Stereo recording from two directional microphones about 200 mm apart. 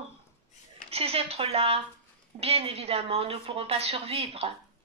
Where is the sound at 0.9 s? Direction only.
30° right (ahead or behind).